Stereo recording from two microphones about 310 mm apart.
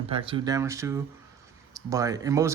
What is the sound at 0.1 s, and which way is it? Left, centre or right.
Speech, centre.